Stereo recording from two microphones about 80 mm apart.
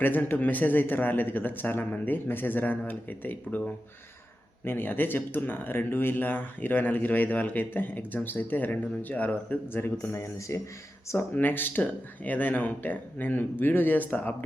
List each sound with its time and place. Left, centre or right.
0.0 s speech: left
10.1 s speech: left
11.1 s speech: left